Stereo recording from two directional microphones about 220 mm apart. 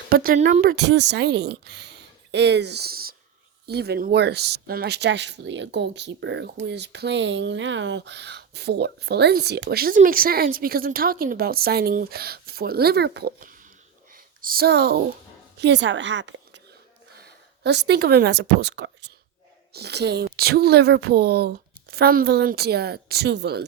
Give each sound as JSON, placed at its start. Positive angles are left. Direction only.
{"t": 0.1, "sound": "speech", "side_deg": -40}
{"t": 14.1, "sound": "a sound", "side_deg": -40}
{"t": 15.5, "sound": "a woman's voice", "side_deg": -50}